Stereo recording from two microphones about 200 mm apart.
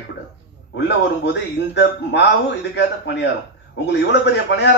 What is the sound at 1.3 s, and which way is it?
A man's voice, 60° left (ahead or behind).